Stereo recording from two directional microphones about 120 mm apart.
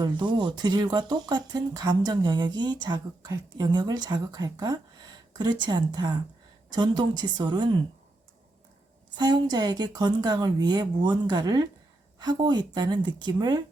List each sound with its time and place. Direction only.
0.0 s speech: 40° right (ahead or behind)
9.1 s speech: 35° right (ahead or behind)